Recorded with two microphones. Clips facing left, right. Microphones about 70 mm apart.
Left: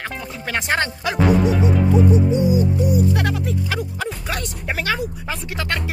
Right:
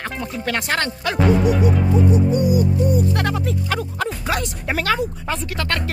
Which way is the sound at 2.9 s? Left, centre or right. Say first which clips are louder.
Even; centre.